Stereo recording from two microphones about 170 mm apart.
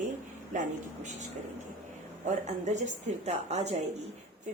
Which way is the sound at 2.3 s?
45° right (ahead or behind).